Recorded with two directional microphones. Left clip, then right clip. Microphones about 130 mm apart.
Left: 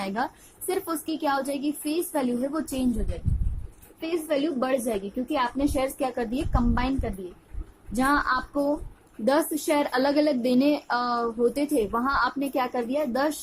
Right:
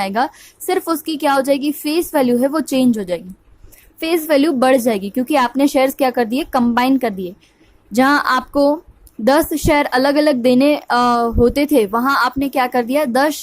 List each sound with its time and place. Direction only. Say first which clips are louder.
0.0 s a woman's voice: right 11 dB; 65° right (ahead or behind)